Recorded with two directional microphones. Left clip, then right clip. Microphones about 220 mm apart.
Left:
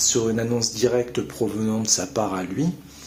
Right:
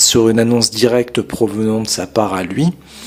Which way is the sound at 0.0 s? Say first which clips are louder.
Right 10 dB; 45° right (ahead or behind).